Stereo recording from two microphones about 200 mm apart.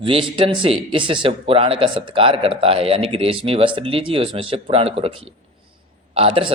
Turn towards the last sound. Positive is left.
turn(degrees=-30)  # may be behind; listen again after turning